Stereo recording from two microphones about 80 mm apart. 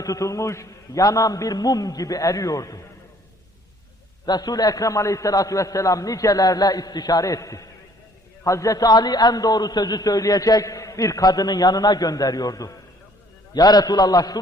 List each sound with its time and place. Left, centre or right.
0.0 s a man's voice: left
4.3 s a man's voice: left